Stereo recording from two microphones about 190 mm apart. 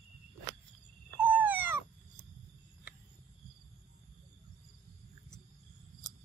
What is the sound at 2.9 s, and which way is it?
Cricket, 10° right (ahead or behind).